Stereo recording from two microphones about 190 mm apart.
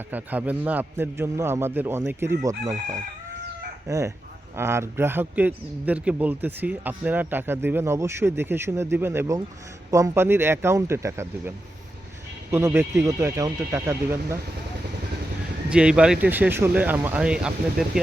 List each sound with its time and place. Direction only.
0.1 s a man's voice: 10° right (ahead or behind)
3.8 s a man's voice: 15° right (ahead or behind)
15.7 s a man's voice: 5° right (ahead or behind)